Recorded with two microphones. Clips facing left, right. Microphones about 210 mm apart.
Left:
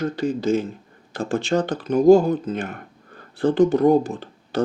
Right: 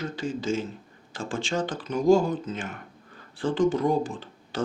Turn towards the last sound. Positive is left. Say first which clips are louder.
# left 8 dB
turn(degrees=60)  # may be behind; listen again after turning